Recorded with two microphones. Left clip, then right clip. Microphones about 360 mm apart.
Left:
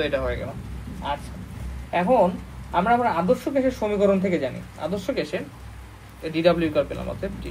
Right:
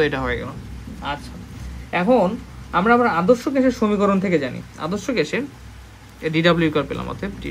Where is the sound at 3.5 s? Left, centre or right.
Right.